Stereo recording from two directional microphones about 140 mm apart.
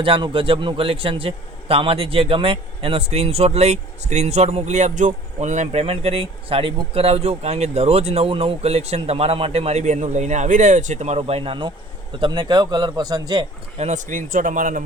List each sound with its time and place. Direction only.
0.0 s a man's voice: 40° right (ahead or behind)
13.7 s speech: 55° right (ahead or behind)